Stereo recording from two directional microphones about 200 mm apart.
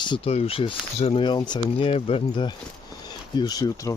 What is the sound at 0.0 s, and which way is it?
Speech, 25° left (ahead or behind).